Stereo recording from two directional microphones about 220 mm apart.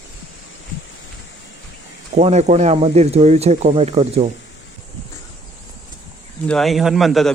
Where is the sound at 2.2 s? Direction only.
30° right (ahead or behind).